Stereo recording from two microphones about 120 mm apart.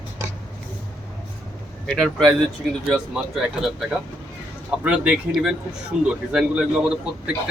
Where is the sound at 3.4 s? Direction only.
5° right (ahead or behind).